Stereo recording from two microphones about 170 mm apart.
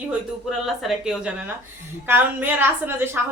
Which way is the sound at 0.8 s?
5° right (ahead or behind).